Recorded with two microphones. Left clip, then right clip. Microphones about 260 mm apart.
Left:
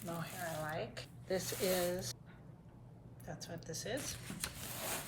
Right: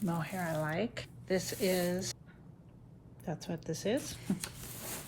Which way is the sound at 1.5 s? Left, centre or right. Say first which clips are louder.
Right 1 dB; right.